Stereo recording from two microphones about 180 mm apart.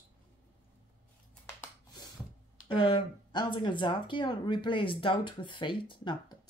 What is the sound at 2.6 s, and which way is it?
Speech, 30° left (ahead or behind).